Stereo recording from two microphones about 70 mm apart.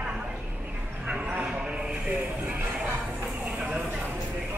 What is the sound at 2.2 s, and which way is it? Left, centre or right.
Music, right.